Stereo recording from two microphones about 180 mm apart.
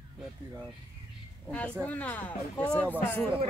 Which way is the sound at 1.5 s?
10° left (ahead or behind).